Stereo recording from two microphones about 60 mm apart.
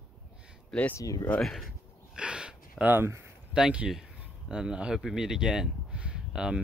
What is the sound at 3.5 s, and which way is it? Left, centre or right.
Speech, centre.